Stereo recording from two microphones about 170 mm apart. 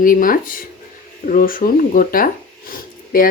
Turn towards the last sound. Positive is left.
turn(degrees=55)  # may be behind; listen again after turning